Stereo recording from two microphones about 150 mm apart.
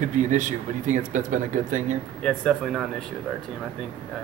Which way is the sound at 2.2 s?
5° left (ahead or behind).